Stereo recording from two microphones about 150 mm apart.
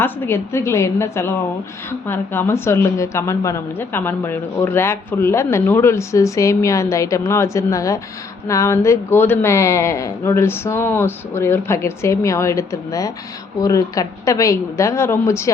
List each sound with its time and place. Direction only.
0.0 s a woman's voice: 15° left (ahead or behind)